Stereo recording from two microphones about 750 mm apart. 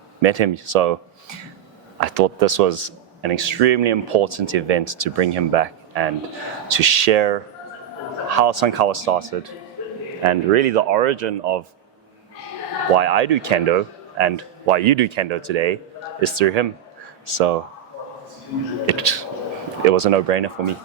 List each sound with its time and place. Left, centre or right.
0.2 s speech: right
2.0 s speech: right
10.2 s speech: right
13.0 s speech: right
18.9 s speech: right